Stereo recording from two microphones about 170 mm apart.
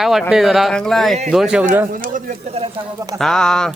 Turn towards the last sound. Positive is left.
turn(degrees=5)  # may be behind; listen again after turning